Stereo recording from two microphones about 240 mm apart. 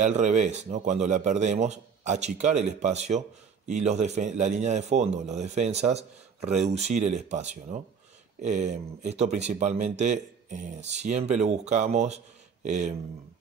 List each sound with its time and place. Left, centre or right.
0.0 s a man's voice: right